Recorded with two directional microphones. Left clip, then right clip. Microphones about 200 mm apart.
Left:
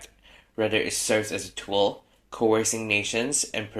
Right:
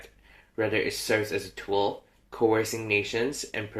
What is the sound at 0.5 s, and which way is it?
Speech, 30° left (ahead or behind).